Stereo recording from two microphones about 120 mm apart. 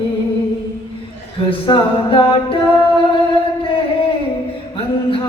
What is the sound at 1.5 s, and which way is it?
A capella, 45° left (ahead or behind).